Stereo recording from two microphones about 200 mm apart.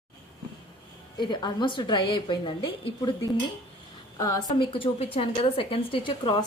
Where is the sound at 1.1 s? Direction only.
20° left (ahead or behind).